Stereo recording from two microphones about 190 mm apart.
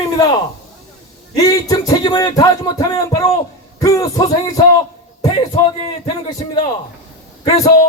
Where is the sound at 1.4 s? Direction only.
20° left (ahead or behind).